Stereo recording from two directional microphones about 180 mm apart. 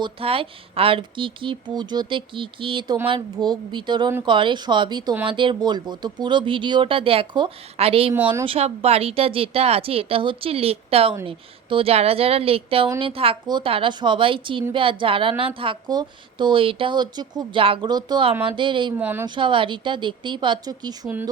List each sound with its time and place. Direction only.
0.0 s a woman's voice: 30° right (ahead or behind)
8.1 s speech: 10° right (ahead or behind)
8.4 s a woman's voice: 35° right (ahead or behind)
18.9 s speech: 10° right (ahead or behind)
19.3 s a woman's voice: 25° right (ahead or behind)